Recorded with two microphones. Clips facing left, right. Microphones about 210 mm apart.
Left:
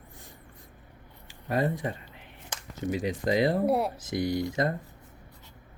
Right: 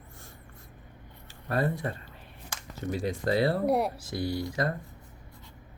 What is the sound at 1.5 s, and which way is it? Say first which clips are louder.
Speech: left 1 dB; 15° left (ahead or behind).